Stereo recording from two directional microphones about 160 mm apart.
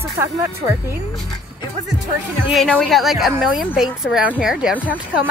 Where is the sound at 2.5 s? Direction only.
Centre (ahead or behind).